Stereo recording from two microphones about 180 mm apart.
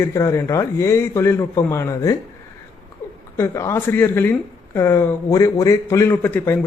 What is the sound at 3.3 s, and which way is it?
A man's voice, 15° left (ahead or behind).